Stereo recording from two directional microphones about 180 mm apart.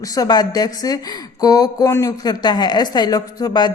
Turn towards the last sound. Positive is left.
turn(degrees=20)  # may be behind; listen again after turning